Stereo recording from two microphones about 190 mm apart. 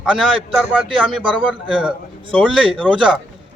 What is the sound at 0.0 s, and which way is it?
Speech, centre (ahead or behind).